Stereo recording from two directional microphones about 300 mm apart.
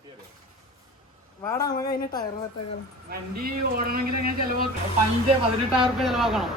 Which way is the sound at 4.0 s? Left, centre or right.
Right.